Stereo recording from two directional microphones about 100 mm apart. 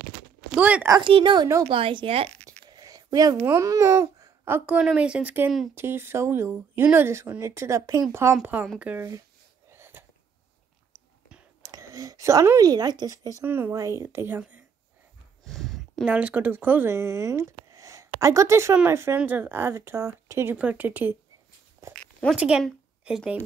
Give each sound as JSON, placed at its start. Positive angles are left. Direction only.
{"t": 0.6, "sound": "speech", "side_deg": -15}
{"t": 1.0, "sound": "a woman's voice", "side_deg": -55}
{"t": 2.7, "sound": "a sound", "side_deg": -40}
{"t": 3.4, "sound": "speech", "side_deg": -30}
{"t": 8.7, "sound": "speech", "side_deg": -15}
{"t": 9.7, "sound": "wheeze", "side_deg": -25}
{"t": 11.6, "sound": "speech", "side_deg": -35}
{"t": 13.4, "sound": "speech", "side_deg": -25}
{"t": 15.4, "sound": "a sound", "side_deg": 0}
{"t": 16.1, "sound": "speech", "side_deg": -15}
{"t": 21.8, "sound": "a sound", "side_deg": -30}
{"t": 22.3, "sound": "speech", "side_deg": -10}